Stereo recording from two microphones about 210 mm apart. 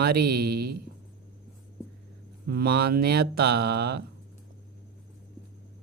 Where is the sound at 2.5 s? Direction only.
45° right (ahead or behind).